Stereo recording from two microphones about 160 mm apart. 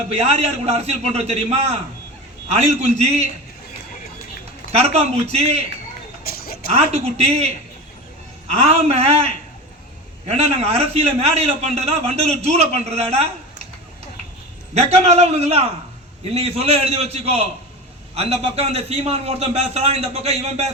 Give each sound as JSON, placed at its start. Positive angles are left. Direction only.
{"t": 0.1, "sound": "a man's voice", "side_deg": -40}
{"t": 4.7, "sound": "a man's voice", "side_deg": -40}
{"t": 6.2, "sound": "a sound", "side_deg": 70}
{"t": 6.7, "sound": "a man's voice", "side_deg": -40}
{"t": 14.8, "sound": "a man's voice", "side_deg": -40}